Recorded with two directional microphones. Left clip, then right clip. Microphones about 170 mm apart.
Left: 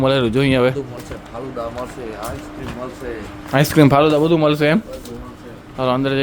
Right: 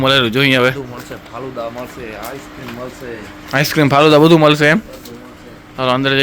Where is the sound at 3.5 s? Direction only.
20° left (ahead or behind).